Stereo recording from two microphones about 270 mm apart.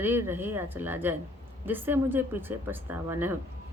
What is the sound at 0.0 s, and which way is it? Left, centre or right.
A woman's voice, centre.